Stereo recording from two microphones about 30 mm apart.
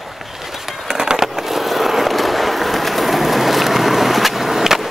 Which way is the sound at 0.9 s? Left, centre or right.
Right.